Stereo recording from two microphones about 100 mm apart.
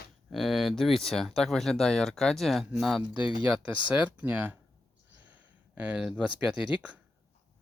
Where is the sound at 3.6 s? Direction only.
15° right (ahead or behind).